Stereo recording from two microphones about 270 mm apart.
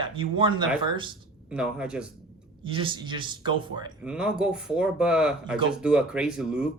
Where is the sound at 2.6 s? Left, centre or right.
Centre.